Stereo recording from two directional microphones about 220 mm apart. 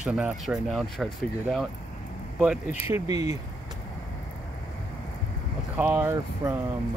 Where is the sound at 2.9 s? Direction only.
15° right (ahead or behind).